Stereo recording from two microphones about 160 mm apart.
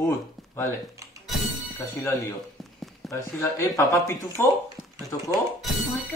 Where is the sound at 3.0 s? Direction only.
20° left (ahead or behind).